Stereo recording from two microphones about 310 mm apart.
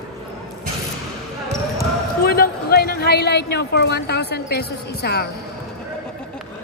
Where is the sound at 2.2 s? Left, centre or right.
Left.